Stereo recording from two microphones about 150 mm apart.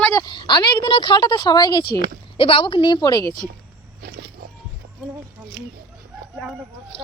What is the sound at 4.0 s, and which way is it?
Wild animals, 90° right.